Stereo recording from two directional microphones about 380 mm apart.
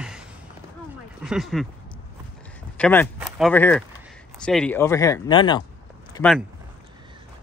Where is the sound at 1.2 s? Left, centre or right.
Centre.